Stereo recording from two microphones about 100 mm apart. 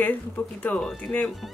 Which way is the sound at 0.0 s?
15° left (ahead or behind).